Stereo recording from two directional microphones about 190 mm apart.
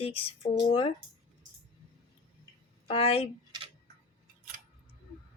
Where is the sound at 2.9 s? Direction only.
30° left (ahead or behind).